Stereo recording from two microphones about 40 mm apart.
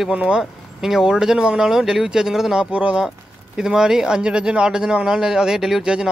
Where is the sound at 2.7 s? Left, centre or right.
Right.